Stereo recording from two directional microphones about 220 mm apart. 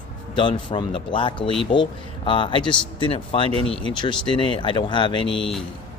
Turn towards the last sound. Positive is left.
turn(degrees=25)  # may be behind; listen again after turning